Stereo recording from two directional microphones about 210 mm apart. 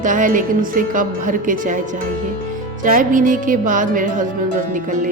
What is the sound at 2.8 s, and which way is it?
Music, 40° right (ahead or behind).